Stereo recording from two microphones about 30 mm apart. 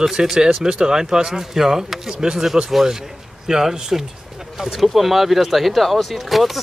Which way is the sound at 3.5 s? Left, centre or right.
Centre.